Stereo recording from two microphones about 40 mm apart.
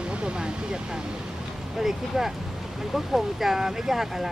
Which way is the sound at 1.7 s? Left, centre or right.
Centre.